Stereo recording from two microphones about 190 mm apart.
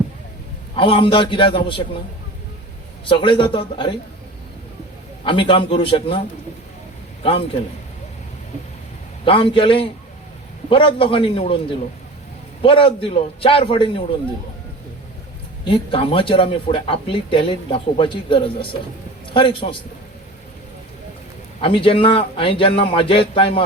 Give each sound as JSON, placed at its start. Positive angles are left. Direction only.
{"t": 0.8, "sound": "speech", "side_deg": 25}
{"t": 3.1, "sound": "speech", "side_deg": 25}
{"t": 5.2, "sound": "a man's voice", "side_deg": 25}
{"t": 9.2, "sound": "speech", "side_deg": 30}
{"t": 12.6, "sound": "speech", "side_deg": 25}
{"t": 15.6, "sound": "speech", "side_deg": 25}
{"t": 21.6, "sound": "speech", "side_deg": 25}